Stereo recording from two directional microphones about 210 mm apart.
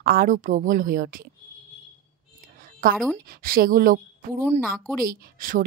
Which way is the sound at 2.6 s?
45° right (ahead or behind).